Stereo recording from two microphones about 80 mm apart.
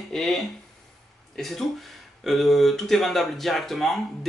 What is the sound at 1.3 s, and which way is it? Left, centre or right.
Speech, centre.